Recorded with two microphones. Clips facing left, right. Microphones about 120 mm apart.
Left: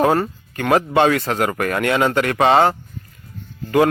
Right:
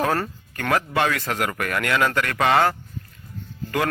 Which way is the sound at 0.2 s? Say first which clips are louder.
Left 6 dB; 20° left (ahead or behind).